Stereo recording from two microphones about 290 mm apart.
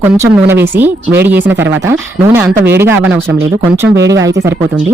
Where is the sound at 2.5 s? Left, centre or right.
Right.